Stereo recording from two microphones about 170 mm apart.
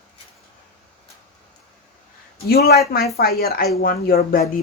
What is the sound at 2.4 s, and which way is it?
Speech, 65° left (ahead or behind).